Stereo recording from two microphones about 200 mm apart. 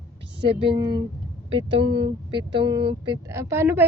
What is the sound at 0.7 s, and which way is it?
Speech, 25° right (ahead or behind).